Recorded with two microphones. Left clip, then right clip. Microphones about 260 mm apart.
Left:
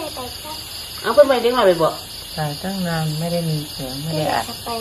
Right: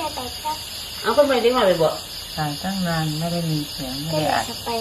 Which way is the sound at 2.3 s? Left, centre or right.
Left.